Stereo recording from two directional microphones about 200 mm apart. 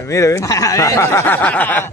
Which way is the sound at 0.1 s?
15° left (ahead or behind).